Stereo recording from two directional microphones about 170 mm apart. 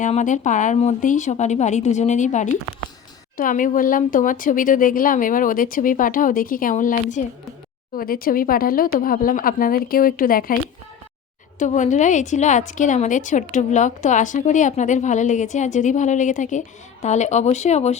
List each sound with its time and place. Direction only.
0.0 s a woman's voice: 45° left (ahead or behind)
7.9 s speech: 60° left (ahead or behind)
11.6 s a woman's voice: 45° left (ahead or behind)